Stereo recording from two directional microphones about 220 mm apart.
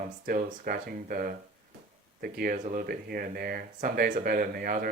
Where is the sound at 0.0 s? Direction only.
40° right (ahead or behind).